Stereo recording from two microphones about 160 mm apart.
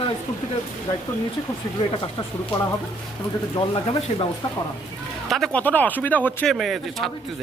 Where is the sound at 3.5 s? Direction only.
30° left (ahead or behind).